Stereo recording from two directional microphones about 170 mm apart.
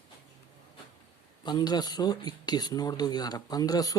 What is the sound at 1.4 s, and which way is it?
A man's voice, 25° left (ahead or behind).